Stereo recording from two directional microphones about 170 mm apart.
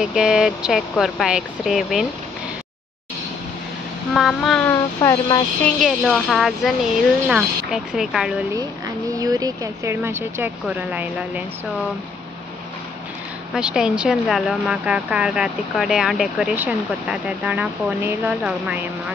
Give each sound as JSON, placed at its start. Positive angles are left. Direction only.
{"t": 0.0, "sound": "speech", "side_deg": -5}
{"t": 4.1, "sound": "speech", "side_deg": 0}
{"t": 4.6, "sound": "speech", "side_deg": 20}
{"t": 5.8, "sound": "speech", "side_deg": 0}
{"t": 9.1, "sound": "speech", "side_deg": -20}
{"t": 13.6, "sound": "speech", "side_deg": -5}